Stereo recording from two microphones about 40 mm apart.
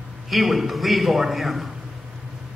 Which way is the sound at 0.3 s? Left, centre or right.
Centre.